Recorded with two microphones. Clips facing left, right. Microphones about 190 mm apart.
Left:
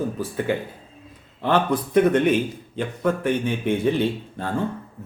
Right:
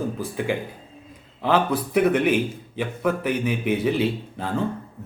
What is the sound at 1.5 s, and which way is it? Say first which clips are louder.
A man's voice: even; 5° right (ahead or behind).